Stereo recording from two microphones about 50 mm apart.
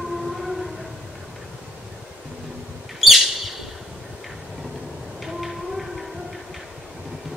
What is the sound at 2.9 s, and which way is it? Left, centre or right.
Bird, centre.